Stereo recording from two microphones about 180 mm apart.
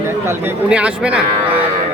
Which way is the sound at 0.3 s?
10° right (ahead or behind).